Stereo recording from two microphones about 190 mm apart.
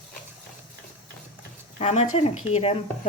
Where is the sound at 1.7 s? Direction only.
35° left (ahead or behind).